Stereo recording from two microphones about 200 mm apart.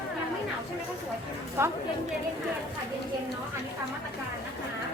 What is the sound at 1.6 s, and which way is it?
Speech, 10° right (ahead or behind).